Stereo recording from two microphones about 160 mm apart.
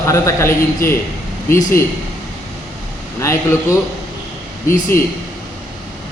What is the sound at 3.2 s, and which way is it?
Speech, 15° left (ahead or behind).